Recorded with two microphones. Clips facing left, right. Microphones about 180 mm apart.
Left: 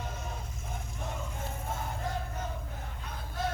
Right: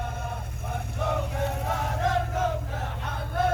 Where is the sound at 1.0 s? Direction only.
70° right (ahead or behind); by 2.5 s 90° right.